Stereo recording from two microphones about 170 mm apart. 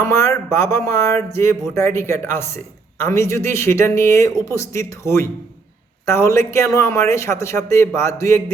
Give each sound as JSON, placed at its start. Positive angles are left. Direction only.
{"t": 0.0, "sound": "speech", "side_deg": 15}